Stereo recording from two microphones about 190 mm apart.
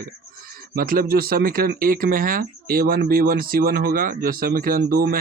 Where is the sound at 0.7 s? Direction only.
50° right (ahead or behind).